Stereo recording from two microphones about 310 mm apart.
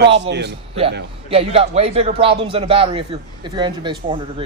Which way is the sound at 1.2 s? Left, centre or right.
Centre.